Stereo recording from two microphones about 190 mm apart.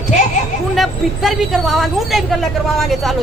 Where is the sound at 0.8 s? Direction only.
Centre (ahead or behind).